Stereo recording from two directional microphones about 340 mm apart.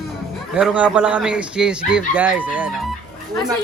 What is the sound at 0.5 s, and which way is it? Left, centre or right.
Speech, centre.